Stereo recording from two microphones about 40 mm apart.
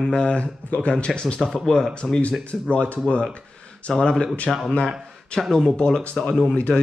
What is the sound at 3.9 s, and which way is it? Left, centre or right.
Speech, left.